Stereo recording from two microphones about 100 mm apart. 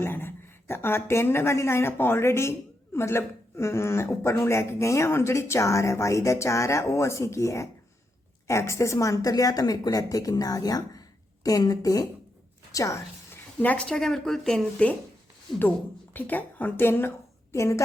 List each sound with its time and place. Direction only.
0.0 s a woman's voice: 25° left (ahead or behind)
13.6 s speech: 15° left (ahead or behind)
16.1 s a woman's voice: 20° left (ahead or behind)